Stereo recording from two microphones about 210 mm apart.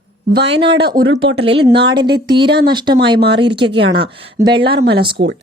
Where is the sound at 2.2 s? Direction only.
20° right (ahead or behind).